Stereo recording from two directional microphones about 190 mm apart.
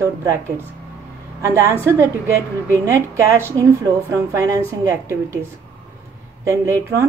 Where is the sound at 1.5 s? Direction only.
15° right (ahead or behind).